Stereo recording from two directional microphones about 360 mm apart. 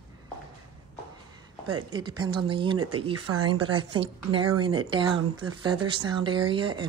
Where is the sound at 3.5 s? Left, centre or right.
Centre.